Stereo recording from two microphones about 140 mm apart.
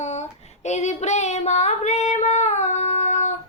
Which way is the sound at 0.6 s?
55° left (ahead or behind).